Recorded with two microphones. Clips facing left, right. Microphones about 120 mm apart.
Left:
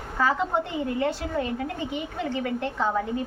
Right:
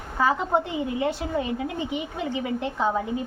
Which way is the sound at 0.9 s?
15° right (ahead or behind).